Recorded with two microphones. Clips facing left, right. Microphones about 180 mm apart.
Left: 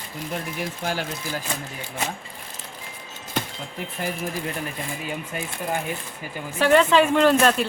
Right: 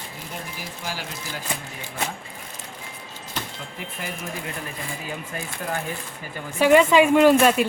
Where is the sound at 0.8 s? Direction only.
55° left (ahead or behind).